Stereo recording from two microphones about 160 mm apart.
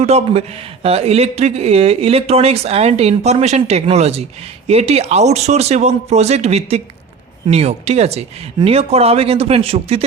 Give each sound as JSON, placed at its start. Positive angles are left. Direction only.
{"t": 0.0, "sound": "speech", "side_deg": -40}